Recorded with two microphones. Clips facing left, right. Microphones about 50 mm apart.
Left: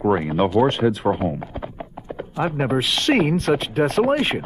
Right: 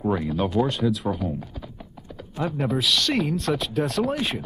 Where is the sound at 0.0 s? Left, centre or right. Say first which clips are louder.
Left 5 dB; left.